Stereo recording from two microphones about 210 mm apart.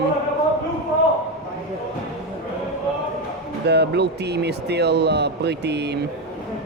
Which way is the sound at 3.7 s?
55° right (ahead or behind).